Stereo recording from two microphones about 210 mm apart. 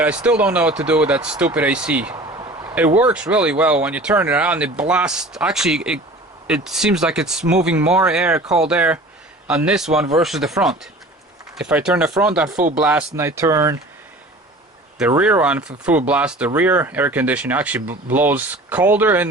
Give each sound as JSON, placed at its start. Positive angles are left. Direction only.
{"t": 0.0, "sound": "speech", "side_deg": -5}
{"t": 2.1, "sound": "a sound", "side_deg": -20}
{"t": 3.0, "sound": "speech", "side_deg": -5}
{"t": 11.5, "sound": "speech", "side_deg": -5}
{"t": 14.9, "sound": "speech", "side_deg": -5}